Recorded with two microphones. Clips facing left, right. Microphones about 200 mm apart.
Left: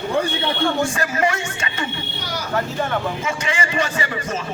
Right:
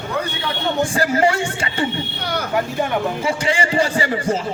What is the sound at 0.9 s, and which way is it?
Speech, 30° right (ahead or behind).